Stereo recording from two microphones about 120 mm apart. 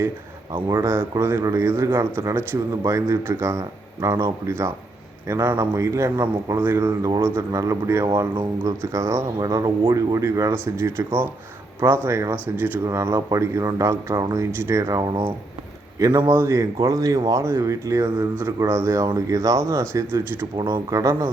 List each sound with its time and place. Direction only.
0.5 s a man's voice: 25° right (ahead or behind)